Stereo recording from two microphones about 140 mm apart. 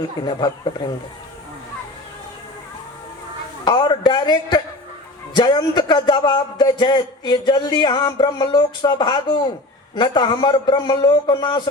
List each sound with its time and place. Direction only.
0.2 s a man's voice: 30° left (ahead or behind)
3.6 s a man's voice: 35° left (ahead or behind)